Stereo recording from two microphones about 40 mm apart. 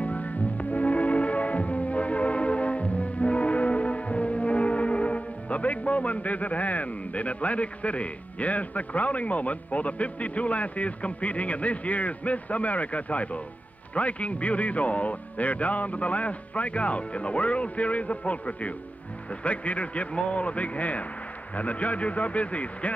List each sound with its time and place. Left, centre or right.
0.0 s music: left
13.9 s speech: left